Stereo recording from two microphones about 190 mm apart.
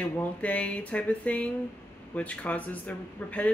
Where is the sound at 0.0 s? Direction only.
5° left (ahead or behind).